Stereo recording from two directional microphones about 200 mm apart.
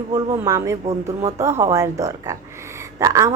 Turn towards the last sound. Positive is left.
turn(degrees=-15)  # may be behind; listen again after turning